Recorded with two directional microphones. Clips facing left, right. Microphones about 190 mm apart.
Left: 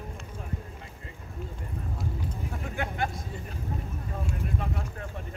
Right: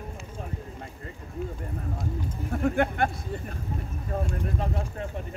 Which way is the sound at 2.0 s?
50° right (ahead or behind).